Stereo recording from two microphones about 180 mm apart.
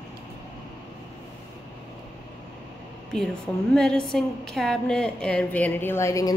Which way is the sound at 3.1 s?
5° left (ahead or behind).